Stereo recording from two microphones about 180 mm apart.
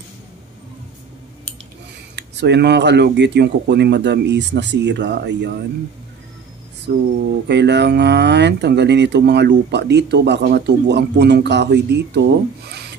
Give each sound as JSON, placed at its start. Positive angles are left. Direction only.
{"t": 2.1, "sound": "speech", "side_deg": -70}
{"t": 6.9, "sound": "speech", "side_deg": -65}